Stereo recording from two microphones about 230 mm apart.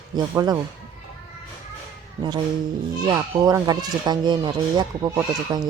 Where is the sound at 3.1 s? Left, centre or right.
Centre.